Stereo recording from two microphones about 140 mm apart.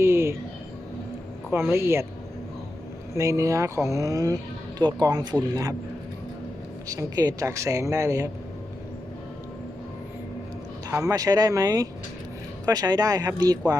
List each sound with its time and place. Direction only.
0.0 s a sound: 20° right (ahead or behind)
1.5 s a man's voice: 15° right (ahead or behind)
3.2 s a man's voice: 20° right (ahead or behind)
6.8 s a man's voice: 25° right (ahead or behind)
10.8 s a man's voice: 25° right (ahead or behind)